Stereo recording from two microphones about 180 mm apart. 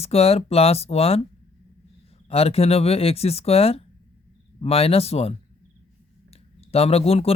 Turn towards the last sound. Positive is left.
turn(degrees=35)  # may be behind; listen again after turning